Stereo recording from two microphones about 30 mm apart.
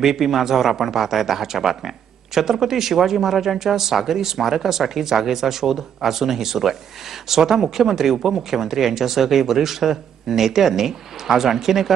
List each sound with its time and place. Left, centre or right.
0.0 s speech: centre